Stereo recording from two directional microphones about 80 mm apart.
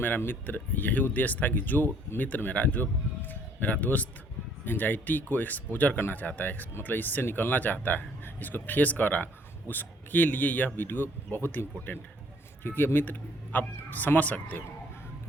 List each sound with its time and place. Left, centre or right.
0.0 s speech: left